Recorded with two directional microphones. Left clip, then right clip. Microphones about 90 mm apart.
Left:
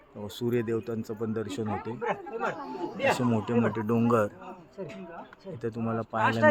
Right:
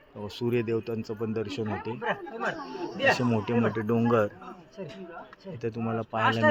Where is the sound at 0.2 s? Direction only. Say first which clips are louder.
Right 1 dB; 20° right (ahead or behind).